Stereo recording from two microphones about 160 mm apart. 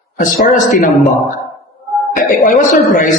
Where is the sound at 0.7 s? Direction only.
55° left (ahead or behind).